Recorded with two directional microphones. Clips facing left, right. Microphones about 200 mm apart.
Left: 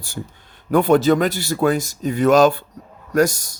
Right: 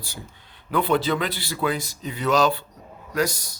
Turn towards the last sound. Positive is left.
turn(degrees=45)  # may be behind; listen again after turning